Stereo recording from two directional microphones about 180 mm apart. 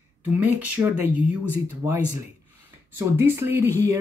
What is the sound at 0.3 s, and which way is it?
Speech, 10° right (ahead or behind).